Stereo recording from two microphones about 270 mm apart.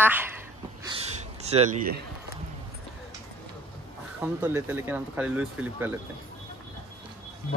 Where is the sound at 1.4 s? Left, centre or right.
Right.